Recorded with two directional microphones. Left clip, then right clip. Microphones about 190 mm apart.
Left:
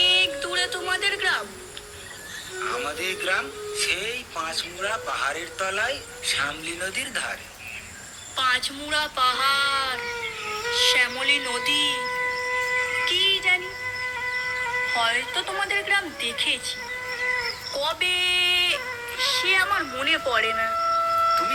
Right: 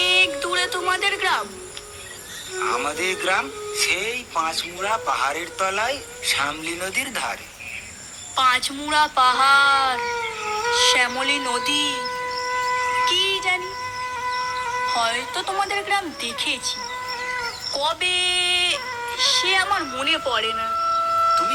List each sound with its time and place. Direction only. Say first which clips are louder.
0.0 s a sound: right 2 dB; 35° right (ahead or behind)
2.6 s speech: right 5 dB; 35° right (ahead or behind)
8.4 s speech: right 4 dB; 35° right (ahead or behind); by 12.4 s 20° right (ahead or behind)
12.5 s music: right 6 dB; 20° right (ahead or behind)